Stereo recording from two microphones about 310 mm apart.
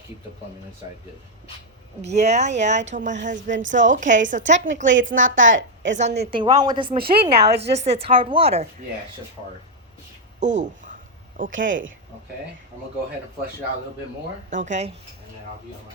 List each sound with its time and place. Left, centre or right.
2.0 s a woman's voice: right
4.9 s a woman's voice: right
5.4 s a woman's voice: right
5.9 s a woman's voice: right
10.4 s a woman's voice: right
14.5 s a woman's voice: right